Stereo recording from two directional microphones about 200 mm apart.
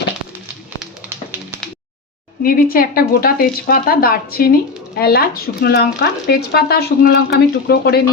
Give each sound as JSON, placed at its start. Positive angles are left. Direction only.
{"t": 0.8, "sound": "tap", "side_deg": -10}
{"t": 2.4, "sound": "speech", "side_deg": 45}